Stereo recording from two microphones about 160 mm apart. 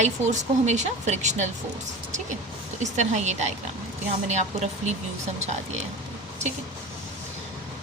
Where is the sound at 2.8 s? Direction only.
45° right (ahead or behind).